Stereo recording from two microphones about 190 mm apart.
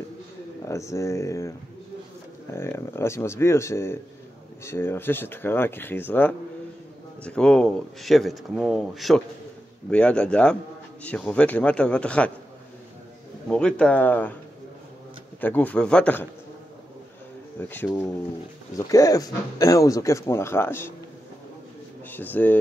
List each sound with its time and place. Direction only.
0.7 s speech: 15° left (ahead or behind)
2.5 s a man's voice: 15° left (ahead or behind)
13.5 s a man's voice: 5° left (ahead or behind)
15.4 s speech: 10° left (ahead or behind)
17.6 s speech: 10° left (ahead or behind)
22.1 s speech: 10° left (ahead or behind)